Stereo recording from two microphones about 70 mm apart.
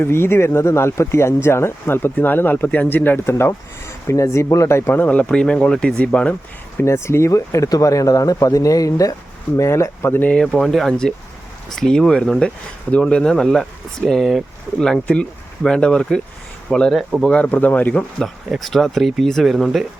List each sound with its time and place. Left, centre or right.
0.0 s speech: left
5.0 s speech: centre
6.8 s speech: left
9.6 s speech: left
10.3 s speech: centre
14.9 s speech: centre
18.5 s speech: centre